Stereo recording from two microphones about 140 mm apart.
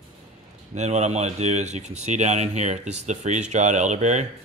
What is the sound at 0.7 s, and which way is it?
Speech, 55° right (ahead or behind).